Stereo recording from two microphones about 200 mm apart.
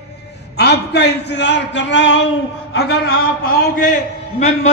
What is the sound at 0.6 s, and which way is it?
A man's voice, 55° left (ahead or behind).